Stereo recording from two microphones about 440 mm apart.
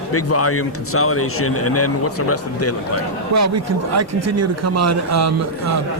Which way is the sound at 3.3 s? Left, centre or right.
Right.